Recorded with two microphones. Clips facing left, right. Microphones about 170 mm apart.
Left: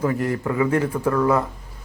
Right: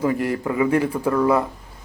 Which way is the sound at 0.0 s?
15° right (ahead or behind).